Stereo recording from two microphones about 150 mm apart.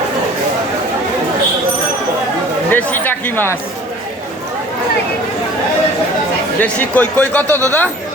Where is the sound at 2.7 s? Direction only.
10° left (ahead or behind).